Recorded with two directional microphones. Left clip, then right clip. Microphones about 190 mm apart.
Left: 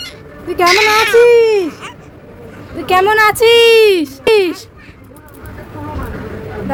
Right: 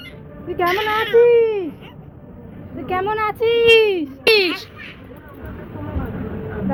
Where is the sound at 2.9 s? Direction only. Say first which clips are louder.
Left 11 dB; 45° left (ahead or behind).